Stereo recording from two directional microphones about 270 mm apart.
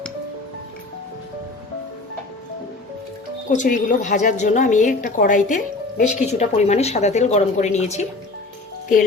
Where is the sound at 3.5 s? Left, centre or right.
Left.